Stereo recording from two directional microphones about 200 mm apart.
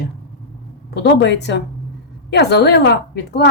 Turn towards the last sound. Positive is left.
turn(degrees=55)  # may be behind; listen again after turning